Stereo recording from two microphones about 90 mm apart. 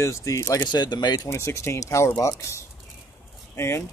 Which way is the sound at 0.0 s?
35° left (ahead or behind).